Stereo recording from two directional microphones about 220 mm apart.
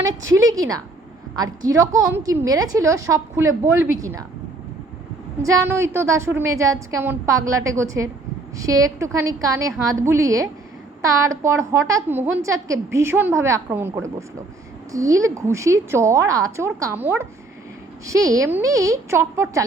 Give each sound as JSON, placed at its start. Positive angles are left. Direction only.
{"t": 0.3, "sound": "a woman's voice", "side_deg": -15}
{"t": 5.4, "sound": "a woman's voice", "side_deg": -15}
{"t": 18.0, "sound": "a woman's voice", "side_deg": -15}